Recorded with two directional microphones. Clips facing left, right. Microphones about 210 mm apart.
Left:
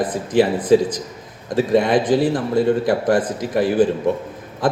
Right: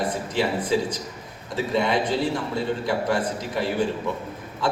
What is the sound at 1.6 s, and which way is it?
A man's voice, 50° left (ahead or behind).